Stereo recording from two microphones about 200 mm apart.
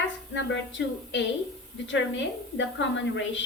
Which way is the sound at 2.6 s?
70° left (ahead or behind).